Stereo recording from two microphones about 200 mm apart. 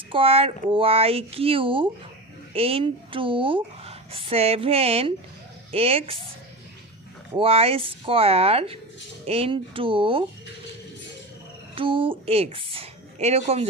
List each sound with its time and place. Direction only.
0.1 s speech: 30° right (ahead or behind)
7.3 s speech: 30° right (ahead or behind)
11.7 s a sound: 25° right (ahead or behind)
12.2 s speech: 30° right (ahead or behind)